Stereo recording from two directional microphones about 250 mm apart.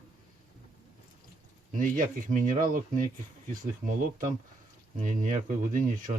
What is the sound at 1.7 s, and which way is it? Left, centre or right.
Speech, right.